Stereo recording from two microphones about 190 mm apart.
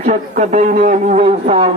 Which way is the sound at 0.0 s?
40° right (ahead or behind).